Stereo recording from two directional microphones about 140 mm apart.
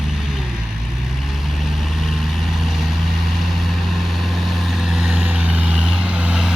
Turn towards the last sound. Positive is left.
turn(degrees=-5)  # may be behind; listen again after turning